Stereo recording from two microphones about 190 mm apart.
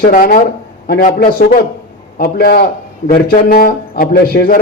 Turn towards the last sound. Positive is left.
turn(degrees=50)  # may be behind; listen again after turning